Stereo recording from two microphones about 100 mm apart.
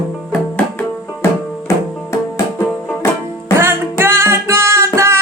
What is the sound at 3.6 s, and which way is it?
Music, 20° right (ahead or behind).